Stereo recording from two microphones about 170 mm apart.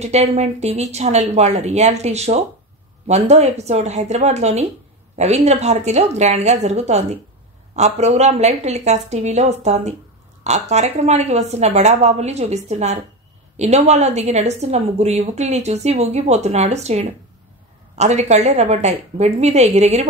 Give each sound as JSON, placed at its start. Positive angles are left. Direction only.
{"t": 0.0, "sound": "a woman's voice", "side_deg": -40}